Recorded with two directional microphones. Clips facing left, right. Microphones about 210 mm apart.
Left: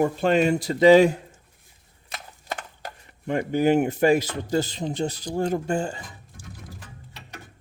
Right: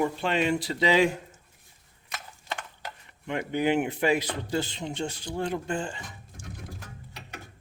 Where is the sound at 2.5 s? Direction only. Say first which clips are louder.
Left 3 dB; 45° left (ahead or behind).